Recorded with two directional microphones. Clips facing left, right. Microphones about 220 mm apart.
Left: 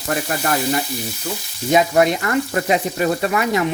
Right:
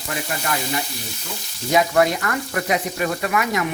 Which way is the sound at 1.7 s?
20° left (ahead or behind).